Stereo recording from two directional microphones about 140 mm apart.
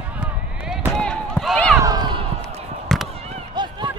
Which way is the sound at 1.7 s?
25° right (ahead or behind).